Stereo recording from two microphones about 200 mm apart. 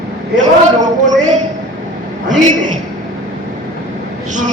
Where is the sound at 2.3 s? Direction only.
40° right (ahead or behind).